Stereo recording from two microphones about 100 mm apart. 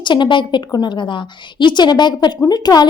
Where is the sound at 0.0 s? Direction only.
50° left (ahead or behind).